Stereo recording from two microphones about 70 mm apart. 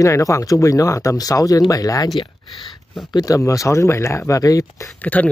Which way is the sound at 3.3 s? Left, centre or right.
Left.